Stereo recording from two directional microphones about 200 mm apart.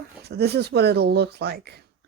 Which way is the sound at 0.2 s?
55° right (ahead or behind).